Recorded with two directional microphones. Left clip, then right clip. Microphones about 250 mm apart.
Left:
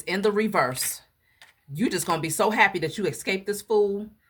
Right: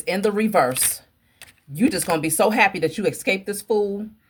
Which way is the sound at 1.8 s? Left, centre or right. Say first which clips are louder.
Right 4 dB; centre.